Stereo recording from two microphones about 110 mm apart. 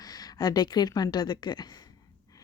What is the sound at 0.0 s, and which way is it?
A woman's voice, 35° left (ahead or behind).